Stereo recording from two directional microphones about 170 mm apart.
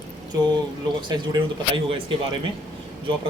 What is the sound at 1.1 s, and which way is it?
Speech, 25° right (ahead or behind).